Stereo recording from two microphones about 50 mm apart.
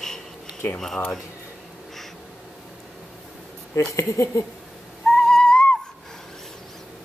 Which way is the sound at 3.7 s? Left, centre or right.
Left.